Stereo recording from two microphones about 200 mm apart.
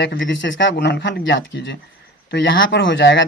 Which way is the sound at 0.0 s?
65° left (ahead or behind).